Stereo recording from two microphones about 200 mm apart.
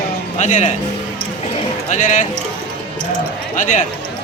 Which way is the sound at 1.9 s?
40° left (ahead or behind).